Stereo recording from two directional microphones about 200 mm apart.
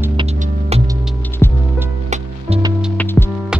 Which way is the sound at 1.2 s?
10° left (ahead or behind).